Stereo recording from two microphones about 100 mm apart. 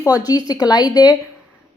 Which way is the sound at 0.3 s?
40° left (ahead or behind).